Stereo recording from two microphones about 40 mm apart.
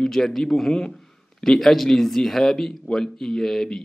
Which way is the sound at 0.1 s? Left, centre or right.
Centre.